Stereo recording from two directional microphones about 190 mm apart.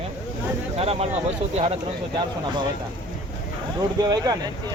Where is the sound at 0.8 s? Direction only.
30° right (ahead or behind).